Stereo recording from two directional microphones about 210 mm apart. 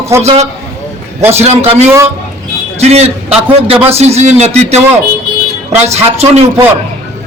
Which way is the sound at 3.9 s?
30° right (ahead or behind).